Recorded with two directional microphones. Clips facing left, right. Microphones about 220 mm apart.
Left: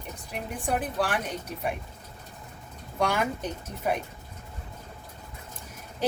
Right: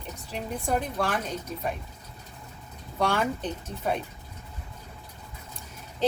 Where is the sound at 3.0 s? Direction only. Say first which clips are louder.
Right 1 dB; 15° left (ahead or behind).